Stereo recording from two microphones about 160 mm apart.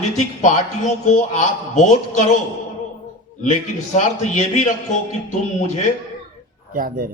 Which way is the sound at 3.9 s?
45° left (ahead or behind).